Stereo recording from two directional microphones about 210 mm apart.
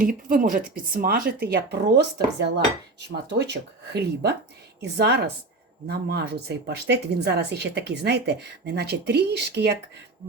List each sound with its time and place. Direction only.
0.0 s speech: 40° right (ahead or behind)